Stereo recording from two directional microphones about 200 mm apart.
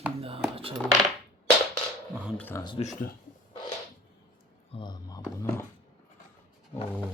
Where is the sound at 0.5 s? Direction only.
30° right (ahead or behind).